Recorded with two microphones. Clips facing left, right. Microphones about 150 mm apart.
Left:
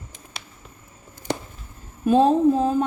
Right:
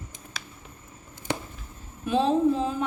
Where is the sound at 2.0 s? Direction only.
45° left (ahead or behind).